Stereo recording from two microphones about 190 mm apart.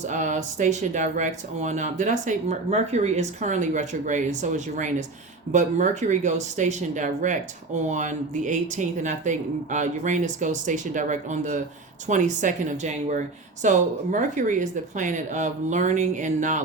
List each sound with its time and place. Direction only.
0.0 s speech: 40° right (ahead or behind)